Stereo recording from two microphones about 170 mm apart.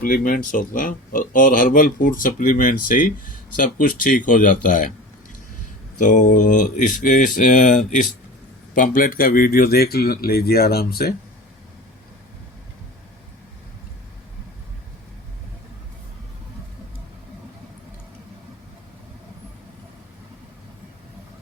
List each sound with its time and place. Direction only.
0.0 s speech: 55° left (ahead or behind)
6.0 s speech: 50° left (ahead or behind); by 11.1 s 65° left (ahead or behind)